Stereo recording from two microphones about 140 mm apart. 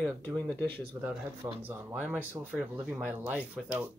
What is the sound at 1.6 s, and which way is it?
Speech, 15° right (ahead or behind).